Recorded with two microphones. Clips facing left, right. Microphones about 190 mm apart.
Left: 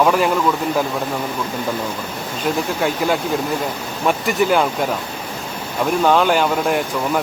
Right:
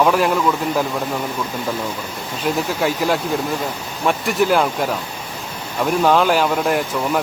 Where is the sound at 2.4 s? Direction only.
Centre (ahead or behind).